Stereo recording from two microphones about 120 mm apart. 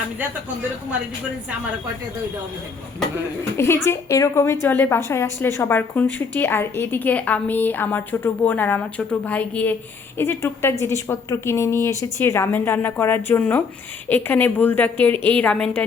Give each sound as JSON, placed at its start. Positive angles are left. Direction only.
{"t": 3.8, "sound": "a woman's voice", "side_deg": 25}